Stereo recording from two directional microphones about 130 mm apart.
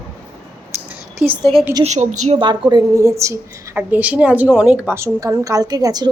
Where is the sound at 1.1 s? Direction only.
15° right (ahead or behind).